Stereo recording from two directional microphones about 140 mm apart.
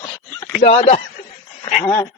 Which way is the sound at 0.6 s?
40° left (ahead or behind).